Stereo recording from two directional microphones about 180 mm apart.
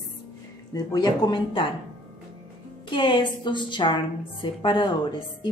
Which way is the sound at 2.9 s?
25° left (ahead or behind).